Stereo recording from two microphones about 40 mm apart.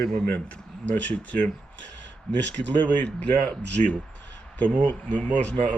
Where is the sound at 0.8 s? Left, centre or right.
Left.